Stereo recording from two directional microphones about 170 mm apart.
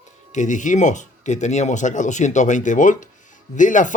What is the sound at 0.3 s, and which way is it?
Speech, 45° left (ahead or behind).